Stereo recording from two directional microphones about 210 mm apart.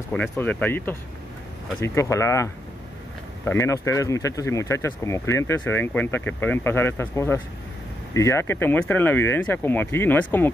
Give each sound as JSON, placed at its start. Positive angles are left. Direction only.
{"t": 0.1, "sound": "speech", "side_deg": 10}
{"t": 2.0, "sound": "speech", "side_deg": 15}